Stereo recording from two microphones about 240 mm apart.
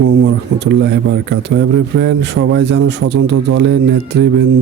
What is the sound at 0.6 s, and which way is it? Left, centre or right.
A man's voice, right.